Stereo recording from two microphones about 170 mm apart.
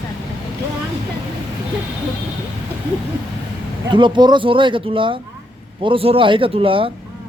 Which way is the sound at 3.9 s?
30° right (ahead or behind).